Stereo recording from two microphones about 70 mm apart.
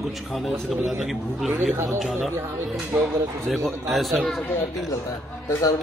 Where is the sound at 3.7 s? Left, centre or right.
Centre.